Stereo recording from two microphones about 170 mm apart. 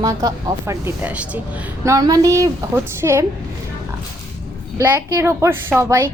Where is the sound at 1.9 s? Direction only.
20° right (ahead or behind).